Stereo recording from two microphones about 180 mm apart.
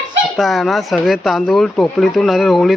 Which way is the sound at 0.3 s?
Centre (ahead or behind).